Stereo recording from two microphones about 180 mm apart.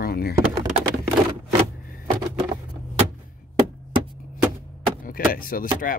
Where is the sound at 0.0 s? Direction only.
60° left (ahead or behind).